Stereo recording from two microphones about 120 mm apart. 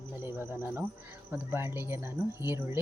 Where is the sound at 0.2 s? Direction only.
20° right (ahead or behind).